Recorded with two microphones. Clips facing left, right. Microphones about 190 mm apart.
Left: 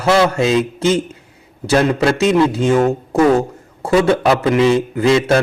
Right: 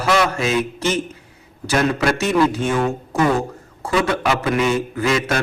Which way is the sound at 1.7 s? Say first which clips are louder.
Left 4 dB; 30° left (ahead or behind).